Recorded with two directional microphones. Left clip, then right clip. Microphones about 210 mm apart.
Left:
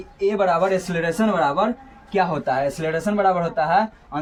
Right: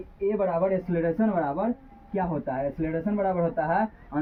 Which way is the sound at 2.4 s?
40° left (ahead or behind).